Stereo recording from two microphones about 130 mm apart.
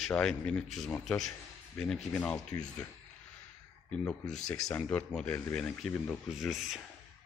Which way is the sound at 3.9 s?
5° left (ahead or behind).